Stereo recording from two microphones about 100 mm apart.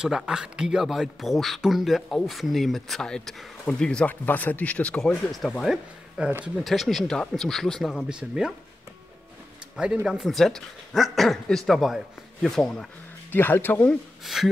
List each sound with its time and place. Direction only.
0.0 s speech: 5° right (ahead or behind)
6.2 s speech: 10° right (ahead or behind)
6.6 s speech: centre (ahead or behind)
8.1 s speech: 10° right (ahead or behind)
10.0 s speech: centre (ahead or behind)
13.3 s speech: 20° left (ahead or behind)
14.2 s speech: centre (ahead or behind)